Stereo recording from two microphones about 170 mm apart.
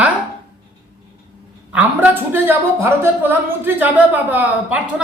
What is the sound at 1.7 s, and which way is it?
A woman's voice, 10° right (ahead or behind).